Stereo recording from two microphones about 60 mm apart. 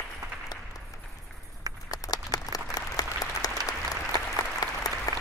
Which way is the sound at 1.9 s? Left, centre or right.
Left.